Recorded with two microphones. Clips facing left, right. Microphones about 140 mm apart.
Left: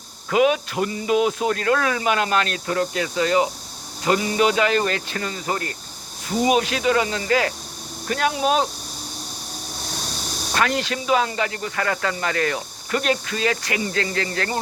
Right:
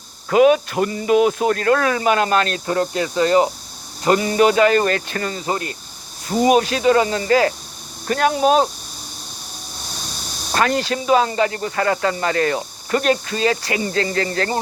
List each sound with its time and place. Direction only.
0.3 s speech: 45° right (ahead or behind)
5.5 s speech: 20° right (ahead or behind)
6.4 s speech: 45° right (ahead or behind)
10.5 s speech: 35° right (ahead or behind)